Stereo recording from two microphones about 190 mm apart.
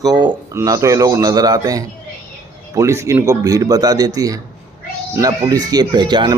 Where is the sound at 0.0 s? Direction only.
20° right (ahead or behind).